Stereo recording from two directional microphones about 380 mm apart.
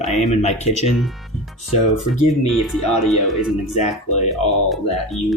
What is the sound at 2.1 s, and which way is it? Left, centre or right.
Speech, centre.